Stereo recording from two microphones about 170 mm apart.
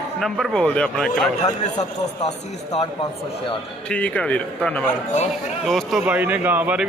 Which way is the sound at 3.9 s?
10° left (ahead or behind).